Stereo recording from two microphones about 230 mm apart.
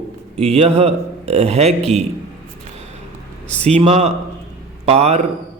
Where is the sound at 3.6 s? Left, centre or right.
Right.